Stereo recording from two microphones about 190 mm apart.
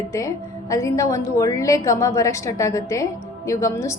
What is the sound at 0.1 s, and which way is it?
A woman's voice, 15° left (ahead or behind).